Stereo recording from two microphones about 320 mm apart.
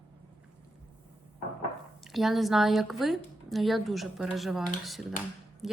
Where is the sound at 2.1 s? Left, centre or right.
Centre.